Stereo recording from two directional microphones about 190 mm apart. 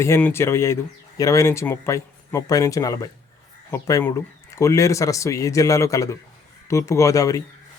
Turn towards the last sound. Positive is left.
turn(degrees=15)  # may be behind; listen again after turning